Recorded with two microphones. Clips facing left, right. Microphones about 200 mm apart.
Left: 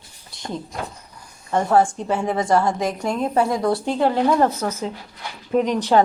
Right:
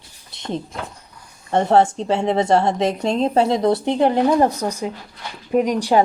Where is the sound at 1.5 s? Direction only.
25° right (ahead or behind).